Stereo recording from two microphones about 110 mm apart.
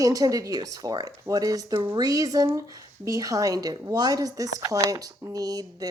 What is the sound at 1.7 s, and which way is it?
Speech, 50° right (ahead or behind).